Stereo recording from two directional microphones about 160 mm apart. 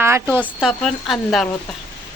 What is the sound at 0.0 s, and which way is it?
Speech, 15° right (ahead or behind).